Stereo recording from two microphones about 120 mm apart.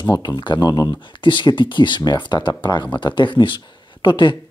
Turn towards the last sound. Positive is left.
turn(degrees=40)  # may be behind; listen again after turning